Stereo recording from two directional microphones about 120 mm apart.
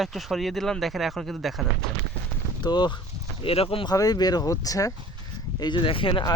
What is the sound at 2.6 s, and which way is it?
Speech, 35° left (ahead or behind).